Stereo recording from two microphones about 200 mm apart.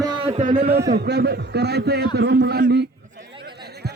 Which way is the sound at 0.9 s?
55° right (ahead or behind).